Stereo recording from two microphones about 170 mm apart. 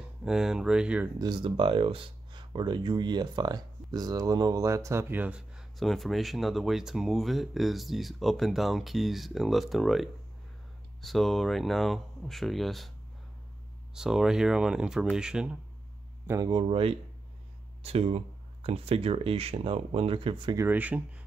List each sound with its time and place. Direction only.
0.2 s speech: 5° right (ahead or behind)
1.2 s speech: 30° right (ahead or behind); by 12.9 s centre (ahead or behind)
13.9 s speech: 5° right (ahead or behind)
16.3 s speech: 20° right (ahead or behind)
20.5 s speech: 10° right (ahead or behind)